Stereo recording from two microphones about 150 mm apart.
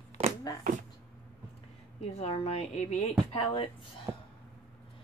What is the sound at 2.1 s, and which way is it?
Speech, 45° left (ahead or behind).